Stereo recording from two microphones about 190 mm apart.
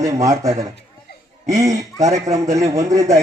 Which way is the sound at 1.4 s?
15° right (ahead or behind).